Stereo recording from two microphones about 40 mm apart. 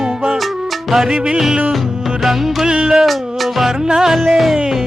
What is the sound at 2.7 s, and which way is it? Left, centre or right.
Music, centre.